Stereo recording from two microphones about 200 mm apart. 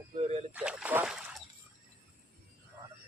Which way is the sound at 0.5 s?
5° right (ahead or behind).